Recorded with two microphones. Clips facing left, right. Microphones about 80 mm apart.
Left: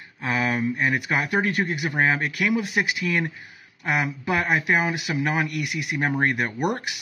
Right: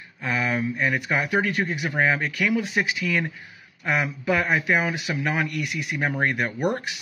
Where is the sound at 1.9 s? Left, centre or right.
Centre.